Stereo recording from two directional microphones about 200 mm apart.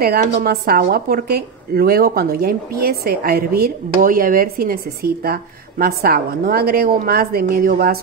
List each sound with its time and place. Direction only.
0.0 s speech: 45° right (ahead or behind)